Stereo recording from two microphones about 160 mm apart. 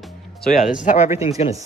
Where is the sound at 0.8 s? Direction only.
45° left (ahead or behind).